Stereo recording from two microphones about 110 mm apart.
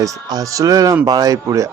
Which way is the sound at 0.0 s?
30° right (ahead or behind).